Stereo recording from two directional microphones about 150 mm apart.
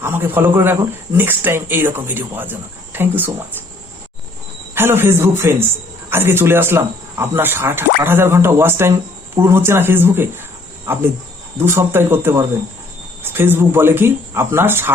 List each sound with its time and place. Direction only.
0.0 s a man's voice: 15° right (ahead or behind)
4.7 s a man's voice: 15° right (ahead or behind)